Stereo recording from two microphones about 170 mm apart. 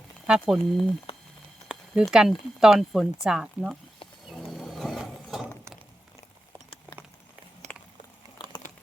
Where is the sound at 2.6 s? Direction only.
Centre (ahead or behind).